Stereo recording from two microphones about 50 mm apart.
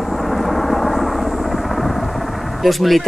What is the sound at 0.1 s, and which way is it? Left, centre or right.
Vehicle, centre.